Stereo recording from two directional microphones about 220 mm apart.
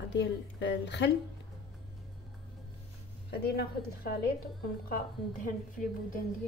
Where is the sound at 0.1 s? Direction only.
50° left (ahead or behind).